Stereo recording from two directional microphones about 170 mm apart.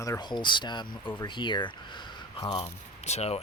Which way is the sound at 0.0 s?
20° left (ahead or behind).